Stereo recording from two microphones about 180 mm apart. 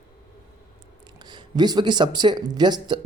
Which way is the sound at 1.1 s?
25° right (ahead or behind).